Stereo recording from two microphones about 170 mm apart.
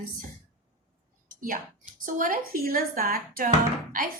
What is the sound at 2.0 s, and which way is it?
Speech, 55° right (ahead or behind).